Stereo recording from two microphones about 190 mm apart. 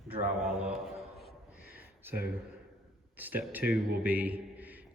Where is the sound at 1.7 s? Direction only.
10° right (ahead or behind).